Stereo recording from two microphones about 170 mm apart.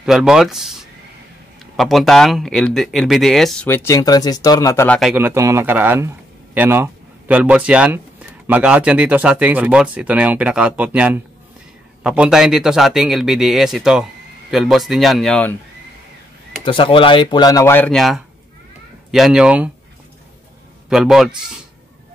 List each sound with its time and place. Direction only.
0.0 s speech: 5° right (ahead or behind)
1.8 s speech: centre (ahead or behind)
3.6 s speech: 15° left (ahead or behind)
4.8 s speech: 5° left (ahead or behind)
5.1 s speech: 15° right (ahead or behind); by 15.5 s 5° left (ahead or behind)
16.6 s speech: 30° left (ahead or behind); by 19.7 s 5° right (ahead or behind)
20.9 s speech: centre (ahead or behind)